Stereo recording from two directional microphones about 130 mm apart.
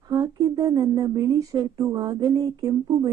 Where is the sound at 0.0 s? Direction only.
30° right (ahead or behind).